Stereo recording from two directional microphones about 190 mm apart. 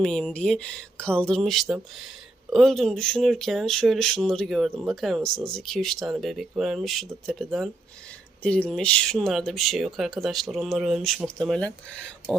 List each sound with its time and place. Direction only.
0.0 s speech: 5° left (ahead or behind)